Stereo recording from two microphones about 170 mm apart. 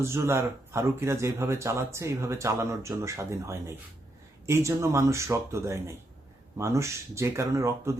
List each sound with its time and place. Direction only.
0.0 s speech: 15° right (ahead or behind)